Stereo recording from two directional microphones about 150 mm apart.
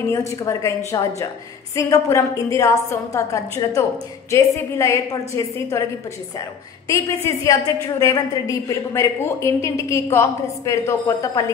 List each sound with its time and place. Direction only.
0.1 s a woman's voice: 20° left (ahead or behind)
6.9 s a woman's voice: 20° left (ahead or behind)